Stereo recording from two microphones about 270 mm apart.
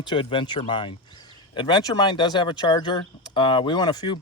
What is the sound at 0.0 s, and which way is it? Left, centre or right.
Speech, centre.